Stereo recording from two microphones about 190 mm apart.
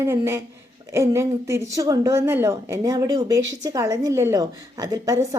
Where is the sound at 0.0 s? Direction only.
15° right (ahead or behind).